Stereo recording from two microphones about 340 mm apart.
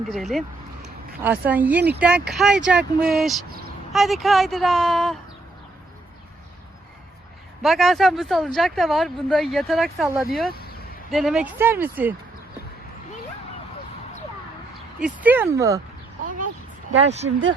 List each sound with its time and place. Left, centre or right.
0.1 s speech: centre
7.6 s speech: centre
15.0 s speech: centre
17.0 s speech: centre